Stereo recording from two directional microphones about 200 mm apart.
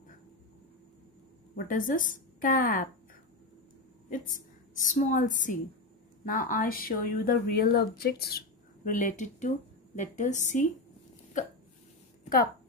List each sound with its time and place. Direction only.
1.7 s speech: 40° left (ahead or behind)
4.1 s a woman's voice: 40° left (ahead or behind)